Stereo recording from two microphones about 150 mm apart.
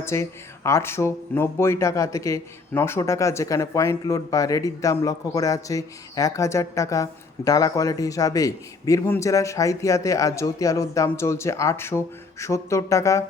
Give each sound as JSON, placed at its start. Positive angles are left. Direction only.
{"t": 0.0, "sound": "speech", "side_deg": 20}